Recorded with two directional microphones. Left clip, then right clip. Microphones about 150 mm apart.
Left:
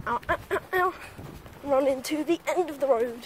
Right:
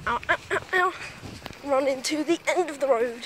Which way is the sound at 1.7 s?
20° left (ahead or behind).